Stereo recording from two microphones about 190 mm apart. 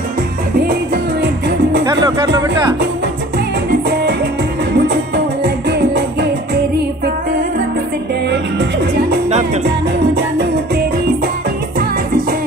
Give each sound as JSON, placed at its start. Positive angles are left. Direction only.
{"t": 1.9, "sound": "speech", "side_deg": -20}
{"t": 4.7, "sound": "music", "side_deg": -60}